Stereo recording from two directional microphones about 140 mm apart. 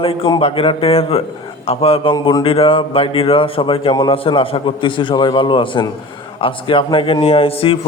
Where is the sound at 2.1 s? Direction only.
30° left (ahead or behind).